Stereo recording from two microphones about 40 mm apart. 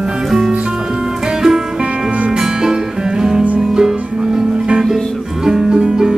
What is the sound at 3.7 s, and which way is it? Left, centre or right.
Music, centre.